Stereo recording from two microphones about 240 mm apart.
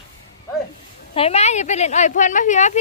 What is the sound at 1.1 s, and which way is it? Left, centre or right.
Speech, left.